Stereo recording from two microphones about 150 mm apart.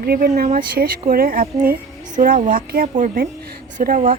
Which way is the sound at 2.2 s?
60° right (ahead or behind).